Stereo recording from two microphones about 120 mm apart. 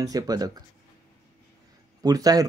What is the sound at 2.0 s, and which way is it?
Speech, 30° right (ahead or behind).